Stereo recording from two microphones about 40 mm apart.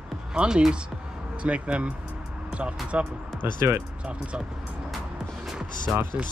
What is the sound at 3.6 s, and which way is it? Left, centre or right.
Speech, right.